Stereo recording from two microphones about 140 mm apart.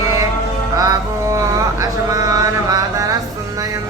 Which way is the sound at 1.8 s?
25° right (ahead or behind).